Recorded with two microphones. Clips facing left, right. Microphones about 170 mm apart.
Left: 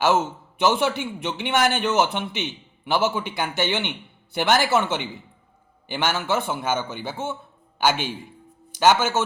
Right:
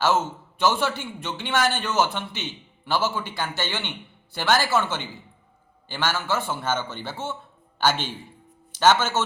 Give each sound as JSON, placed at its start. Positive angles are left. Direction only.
{"t": 0.0, "sound": "a man's voice", "side_deg": 15}